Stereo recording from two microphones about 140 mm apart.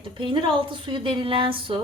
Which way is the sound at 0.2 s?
35° right (ahead or behind).